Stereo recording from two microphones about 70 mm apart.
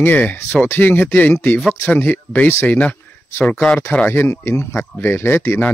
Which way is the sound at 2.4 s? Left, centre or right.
Left.